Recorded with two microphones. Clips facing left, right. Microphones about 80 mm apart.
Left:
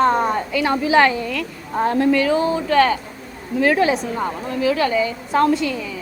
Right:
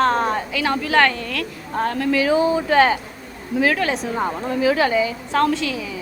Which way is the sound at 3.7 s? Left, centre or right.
Centre.